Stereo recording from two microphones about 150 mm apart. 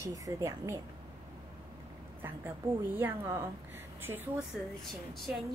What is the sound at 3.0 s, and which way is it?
Speech, 15° right (ahead or behind).